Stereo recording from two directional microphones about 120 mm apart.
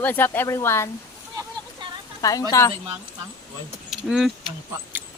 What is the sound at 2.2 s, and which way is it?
Speech, 30° left (ahead or behind).